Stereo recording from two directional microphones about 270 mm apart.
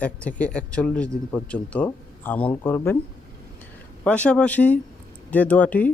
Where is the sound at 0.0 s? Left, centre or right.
Centre.